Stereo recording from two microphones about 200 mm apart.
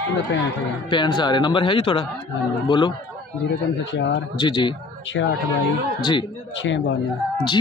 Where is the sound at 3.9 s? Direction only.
60° left (ahead or behind).